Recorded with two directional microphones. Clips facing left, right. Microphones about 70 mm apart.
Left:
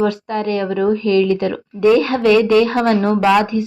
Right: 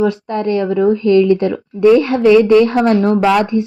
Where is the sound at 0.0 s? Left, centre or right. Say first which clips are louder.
Right 2 dB; right.